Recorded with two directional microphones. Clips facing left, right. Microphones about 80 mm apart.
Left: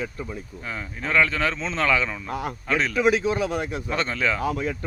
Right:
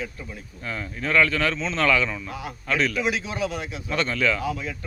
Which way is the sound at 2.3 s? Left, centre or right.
Left.